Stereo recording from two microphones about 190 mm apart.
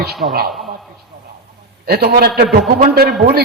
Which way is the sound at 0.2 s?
35° right (ahead or behind).